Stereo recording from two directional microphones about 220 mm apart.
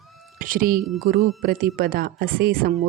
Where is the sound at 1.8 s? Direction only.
40° right (ahead or behind).